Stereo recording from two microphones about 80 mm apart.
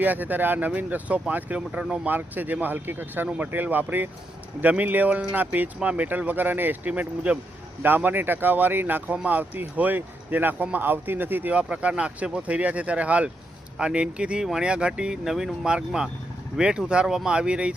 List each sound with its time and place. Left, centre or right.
0.0 s speech: right